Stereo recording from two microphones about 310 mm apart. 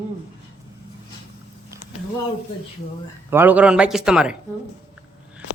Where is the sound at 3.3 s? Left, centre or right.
Centre.